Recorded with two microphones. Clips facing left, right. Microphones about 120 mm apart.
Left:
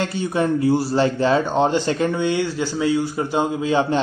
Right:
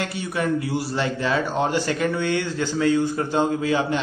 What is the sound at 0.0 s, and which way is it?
A man's voice, 30° left (ahead or behind).